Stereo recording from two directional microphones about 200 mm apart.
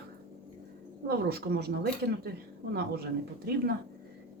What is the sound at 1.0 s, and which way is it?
Speech, 50° right (ahead or behind).